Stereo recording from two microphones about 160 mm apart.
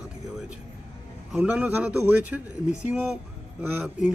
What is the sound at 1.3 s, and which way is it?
Speech, 5° right (ahead or behind).